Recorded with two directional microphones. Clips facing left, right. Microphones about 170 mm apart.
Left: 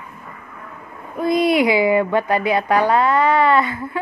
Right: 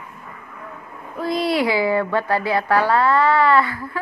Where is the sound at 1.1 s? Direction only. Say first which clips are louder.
Left 4 dB; 15° left (ahead or behind).